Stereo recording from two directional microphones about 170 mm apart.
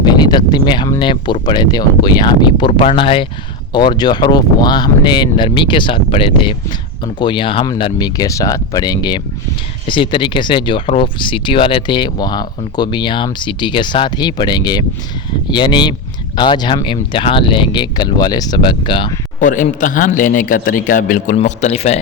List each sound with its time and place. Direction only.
0.0 s speech: 25° left (ahead or behind)
19.4 s a man's voice: 50° left (ahead or behind)